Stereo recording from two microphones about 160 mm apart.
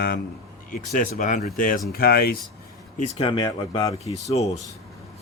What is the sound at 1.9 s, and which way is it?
Speech, 75° left (ahead or behind).